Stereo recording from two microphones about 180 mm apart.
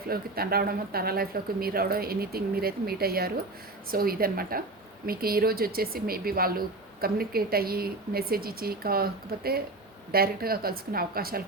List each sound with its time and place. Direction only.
0.1 s speech: 55° right (ahead or behind)